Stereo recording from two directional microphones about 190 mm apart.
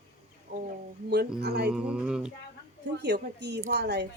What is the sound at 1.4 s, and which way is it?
Speech, 60° right (ahead or behind).